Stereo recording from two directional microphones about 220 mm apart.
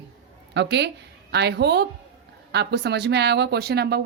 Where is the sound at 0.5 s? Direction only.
50° right (ahead or behind).